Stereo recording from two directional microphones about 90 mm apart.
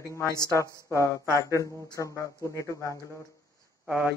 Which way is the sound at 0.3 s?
45° left (ahead or behind).